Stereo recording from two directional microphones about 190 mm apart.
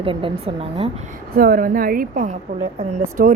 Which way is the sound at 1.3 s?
50° right (ahead or behind).